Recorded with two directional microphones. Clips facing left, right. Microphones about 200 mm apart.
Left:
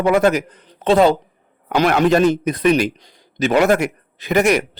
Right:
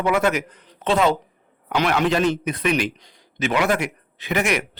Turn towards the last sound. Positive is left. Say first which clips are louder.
# left 7 dB
turn(degrees=40)  # may be behind; listen again after turning